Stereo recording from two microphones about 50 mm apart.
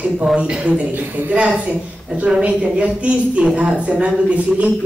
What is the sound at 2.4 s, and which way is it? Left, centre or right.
A man's voice, right.